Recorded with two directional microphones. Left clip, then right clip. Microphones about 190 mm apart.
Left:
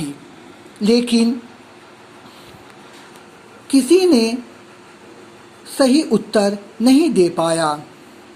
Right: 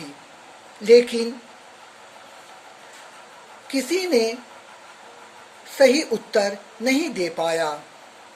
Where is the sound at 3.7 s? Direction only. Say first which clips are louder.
Left 8 dB; 10° left (ahead or behind).